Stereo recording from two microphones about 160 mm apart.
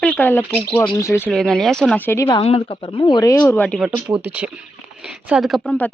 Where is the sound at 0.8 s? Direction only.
25° left (ahead or behind).